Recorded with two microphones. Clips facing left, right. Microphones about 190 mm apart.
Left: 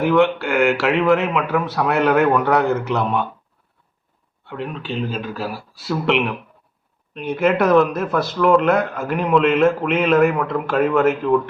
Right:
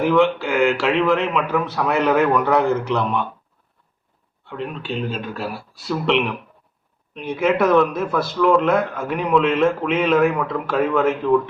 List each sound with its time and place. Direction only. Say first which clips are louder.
0.0 s speech: left 1 dB; centre (ahead or behind)
4.4 s speech: even; centre (ahead or behind)